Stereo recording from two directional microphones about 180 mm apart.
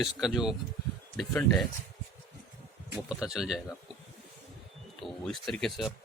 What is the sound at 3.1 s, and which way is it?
Speech, 5° right (ahead or behind).